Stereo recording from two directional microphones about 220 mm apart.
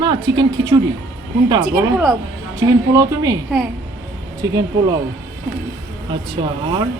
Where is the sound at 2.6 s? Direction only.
15° right (ahead or behind).